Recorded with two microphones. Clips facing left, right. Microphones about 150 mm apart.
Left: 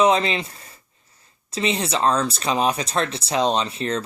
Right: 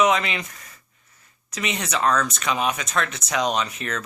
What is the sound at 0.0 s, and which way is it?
Speech, 30° left (ahead or behind).